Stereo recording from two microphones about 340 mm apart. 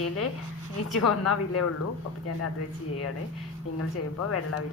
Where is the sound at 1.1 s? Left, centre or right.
Left.